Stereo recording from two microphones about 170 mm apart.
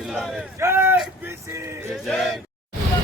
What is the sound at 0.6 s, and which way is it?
Speech, 15° right (ahead or behind).